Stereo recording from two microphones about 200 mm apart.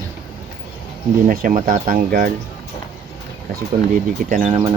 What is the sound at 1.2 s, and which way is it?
Speech, 45° right (ahead or behind).